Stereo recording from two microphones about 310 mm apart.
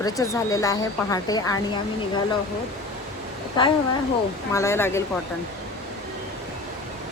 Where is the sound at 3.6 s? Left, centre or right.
Centre.